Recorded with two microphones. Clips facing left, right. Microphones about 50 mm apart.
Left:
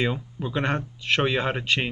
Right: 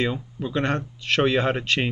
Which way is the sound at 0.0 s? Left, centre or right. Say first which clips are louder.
Right 1 dB; centre.